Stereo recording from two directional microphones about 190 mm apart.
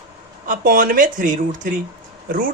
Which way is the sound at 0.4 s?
45° right (ahead or behind).